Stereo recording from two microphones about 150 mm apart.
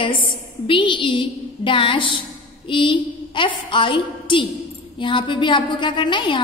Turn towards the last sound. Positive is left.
turn(degrees=30)  # may be behind; listen again after turning